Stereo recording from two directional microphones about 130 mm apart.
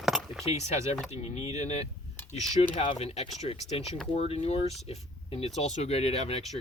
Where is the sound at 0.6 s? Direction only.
55° left (ahead or behind).